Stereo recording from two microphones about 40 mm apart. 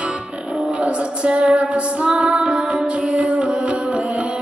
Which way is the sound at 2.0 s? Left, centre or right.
Centre.